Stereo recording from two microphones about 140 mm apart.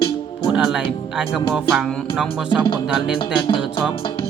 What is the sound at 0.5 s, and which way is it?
Speech, 5° right (ahead or behind).